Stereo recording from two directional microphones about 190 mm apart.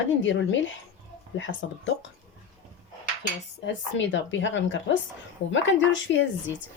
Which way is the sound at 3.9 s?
80° left.